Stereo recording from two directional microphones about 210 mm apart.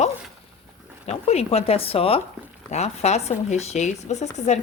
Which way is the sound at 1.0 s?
30° left (ahead or behind).